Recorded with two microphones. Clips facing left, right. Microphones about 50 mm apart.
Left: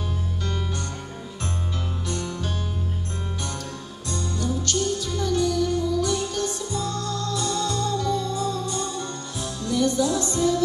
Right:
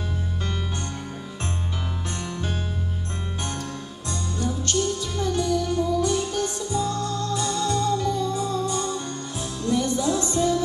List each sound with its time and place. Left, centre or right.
2.0 s music: right
4.4 s music: right